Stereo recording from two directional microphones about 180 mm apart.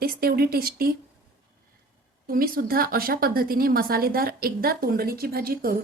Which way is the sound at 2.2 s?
55° right (ahead or behind).